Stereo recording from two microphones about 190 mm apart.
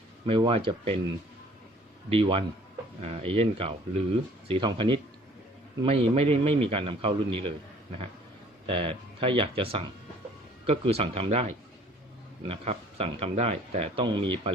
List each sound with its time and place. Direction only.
0.3 s a man's voice: 25° right (ahead or behind)
2.0 s a man's voice: 30° right (ahead or behind)
8.6 s a man's voice: 30° right (ahead or behind)